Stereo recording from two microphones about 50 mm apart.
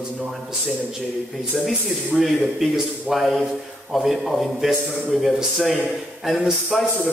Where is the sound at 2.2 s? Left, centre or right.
Centre.